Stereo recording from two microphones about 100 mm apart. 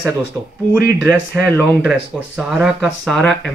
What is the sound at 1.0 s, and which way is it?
Speech, 15° left (ahead or behind).